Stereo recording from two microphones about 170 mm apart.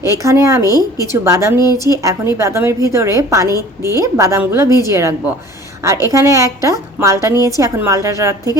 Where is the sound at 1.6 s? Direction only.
20° left (ahead or behind).